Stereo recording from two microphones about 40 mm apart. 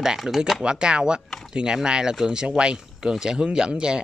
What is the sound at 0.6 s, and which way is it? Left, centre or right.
Speech, right.